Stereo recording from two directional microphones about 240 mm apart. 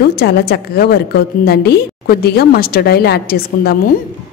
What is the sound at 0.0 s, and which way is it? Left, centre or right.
A woman's voice, left.